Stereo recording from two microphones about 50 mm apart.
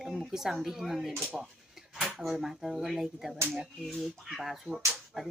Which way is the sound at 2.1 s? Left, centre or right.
Centre.